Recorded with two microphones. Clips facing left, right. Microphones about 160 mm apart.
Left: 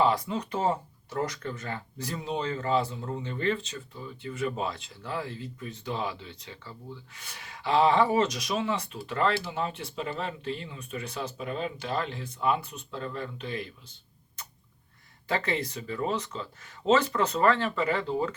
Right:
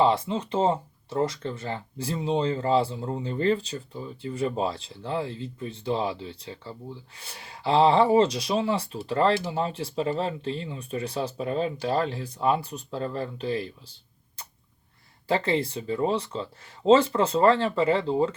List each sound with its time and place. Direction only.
0.0 s speech: 25° right (ahead or behind)
15.3 s speech: 30° right (ahead or behind)